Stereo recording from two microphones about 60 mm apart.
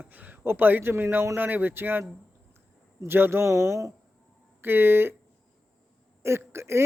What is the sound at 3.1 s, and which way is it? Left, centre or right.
Speech, right.